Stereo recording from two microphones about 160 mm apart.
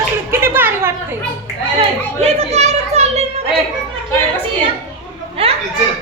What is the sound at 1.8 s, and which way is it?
Speech, 40° right (ahead or behind).